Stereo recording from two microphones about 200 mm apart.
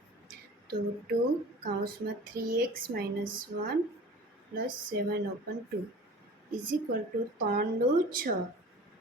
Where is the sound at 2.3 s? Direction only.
45° right (ahead or behind).